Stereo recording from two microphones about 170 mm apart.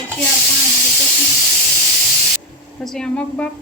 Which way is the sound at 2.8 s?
5° left (ahead or behind).